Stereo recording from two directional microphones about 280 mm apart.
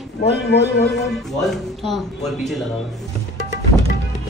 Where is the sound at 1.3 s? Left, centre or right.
Centre.